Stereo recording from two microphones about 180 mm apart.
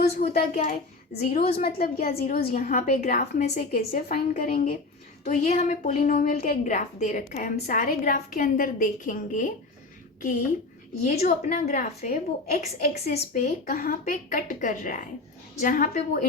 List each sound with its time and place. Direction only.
0.3 s a woman's voice: 40° left (ahead or behind)
3.7 s a woman's voice: 55° left (ahead or behind)
5.2 s a woman's voice: 40° left (ahead or behind)
11.0 s a woman's voice: 40° left (ahead or behind)